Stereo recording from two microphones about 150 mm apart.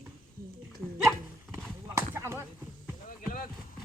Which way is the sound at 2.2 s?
20° right (ahead or behind).